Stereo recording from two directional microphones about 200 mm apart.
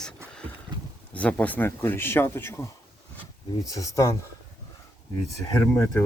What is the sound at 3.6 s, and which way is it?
Speech, 15° left (ahead or behind).